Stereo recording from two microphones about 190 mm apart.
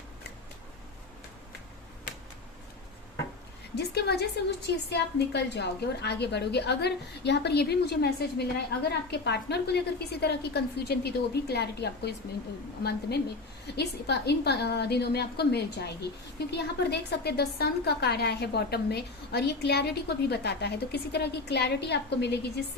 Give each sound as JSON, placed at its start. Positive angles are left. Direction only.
{"t": 3.8, "sound": "a woman's voice", "side_deg": 60}